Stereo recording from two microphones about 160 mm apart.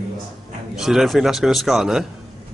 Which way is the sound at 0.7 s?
5° right (ahead or behind).